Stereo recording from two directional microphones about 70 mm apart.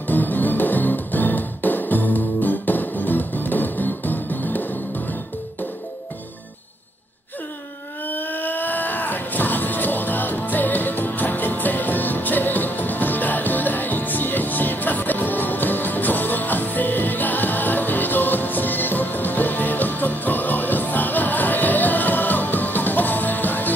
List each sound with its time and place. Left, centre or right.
0.0 s music: left
8.1 s music: left